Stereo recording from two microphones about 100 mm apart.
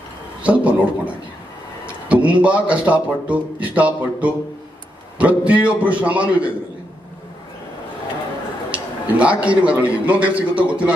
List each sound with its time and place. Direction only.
0.4 s speech: 15° right (ahead or behind)
8.7 s a sound: 15° right (ahead or behind)
9.6 s speech: 15° right (ahead or behind)